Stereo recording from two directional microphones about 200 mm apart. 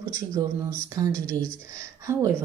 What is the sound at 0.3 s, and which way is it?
Speech, 15° right (ahead or behind).